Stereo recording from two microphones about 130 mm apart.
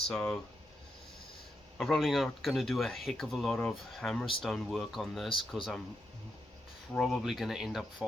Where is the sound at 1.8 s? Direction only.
Centre (ahead or behind).